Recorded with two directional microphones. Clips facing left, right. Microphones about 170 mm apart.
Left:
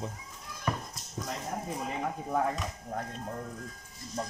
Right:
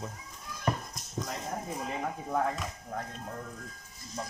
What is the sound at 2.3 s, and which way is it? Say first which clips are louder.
Speech: even; 5° left (ahead or behind).